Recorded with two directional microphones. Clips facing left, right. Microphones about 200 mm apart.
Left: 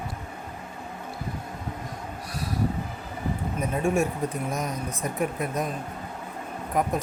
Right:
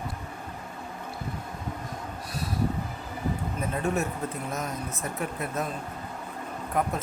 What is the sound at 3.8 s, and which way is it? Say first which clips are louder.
Speech: left 5 dB; 15° left (ahead or behind).